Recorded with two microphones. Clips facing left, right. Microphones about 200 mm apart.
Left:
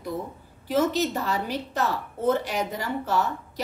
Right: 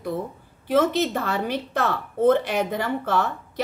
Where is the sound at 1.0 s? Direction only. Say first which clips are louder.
Right 2 dB; 60° right (ahead or behind).